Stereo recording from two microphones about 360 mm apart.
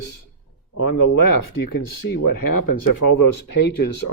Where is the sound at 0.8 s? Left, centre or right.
Left.